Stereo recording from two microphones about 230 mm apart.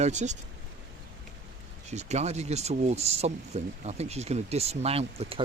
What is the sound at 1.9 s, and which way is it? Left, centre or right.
Speech, right.